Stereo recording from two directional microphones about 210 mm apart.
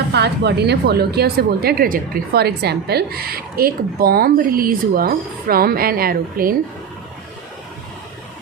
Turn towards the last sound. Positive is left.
turn(degrees=-45)  # may be behind; listen again after turning